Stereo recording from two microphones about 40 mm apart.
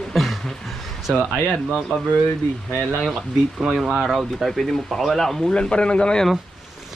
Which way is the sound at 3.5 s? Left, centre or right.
Centre.